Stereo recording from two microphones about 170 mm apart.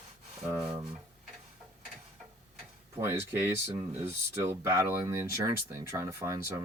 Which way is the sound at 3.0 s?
15° right (ahead or behind).